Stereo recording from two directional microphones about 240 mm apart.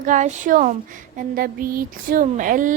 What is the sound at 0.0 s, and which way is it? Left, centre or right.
A woman's voice, right.